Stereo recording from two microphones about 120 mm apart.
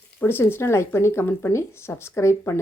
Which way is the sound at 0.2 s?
20° left (ahead or behind).